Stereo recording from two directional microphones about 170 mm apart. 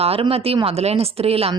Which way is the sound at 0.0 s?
35° right (ahead or behind).